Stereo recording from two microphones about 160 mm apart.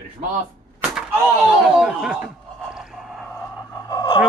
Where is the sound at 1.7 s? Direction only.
5° right (ahead or behind).